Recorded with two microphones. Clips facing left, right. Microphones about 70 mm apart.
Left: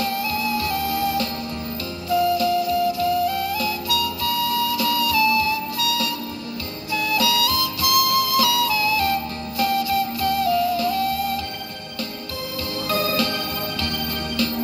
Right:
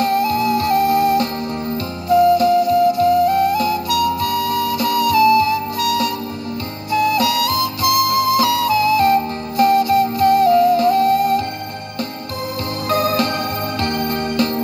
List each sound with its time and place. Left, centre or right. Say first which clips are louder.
0.2 s music: right 7 dB; right
6.9 s flute: right 6 dB; right
12.8 s music: right 5 dB; right